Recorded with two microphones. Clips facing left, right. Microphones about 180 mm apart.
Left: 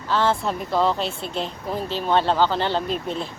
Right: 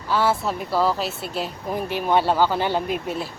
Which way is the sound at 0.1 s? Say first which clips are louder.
Even; 10° right (ahead or behind).